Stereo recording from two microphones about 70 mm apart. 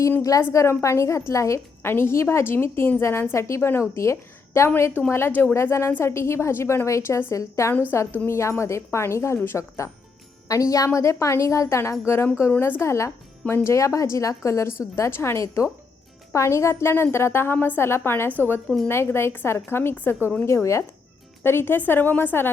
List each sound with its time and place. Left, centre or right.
0.2 s a woman's voice: left
0.5 s a woman's voice: left
7.7 s a woman's voice: left